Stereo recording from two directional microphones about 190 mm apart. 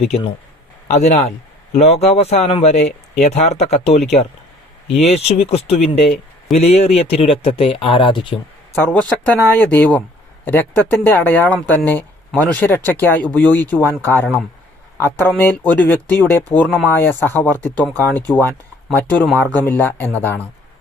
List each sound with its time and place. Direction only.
0.9 s speech: 35° left (ahead or behind)
8.7 s speech: 5° left (ahead or behind)
16.6 s speech: centre (ahead or behind)
16.9 s speech: 10° left (ahead or behind)